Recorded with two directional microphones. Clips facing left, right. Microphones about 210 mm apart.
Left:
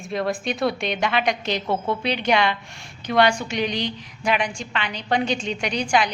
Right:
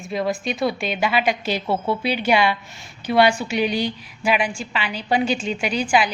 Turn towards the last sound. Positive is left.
turn(degrees=-5)  # may be behind; listen again after turning